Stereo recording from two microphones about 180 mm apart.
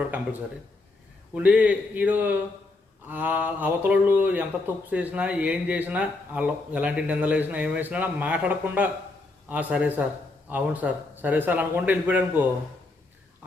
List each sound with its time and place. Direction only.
1.3 s speech: 5° right (ahead or behind)